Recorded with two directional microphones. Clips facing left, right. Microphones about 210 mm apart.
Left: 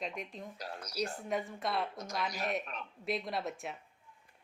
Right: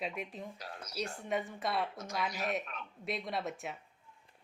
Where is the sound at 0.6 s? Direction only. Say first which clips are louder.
Left 5 dB; 40° left (ahead or behind).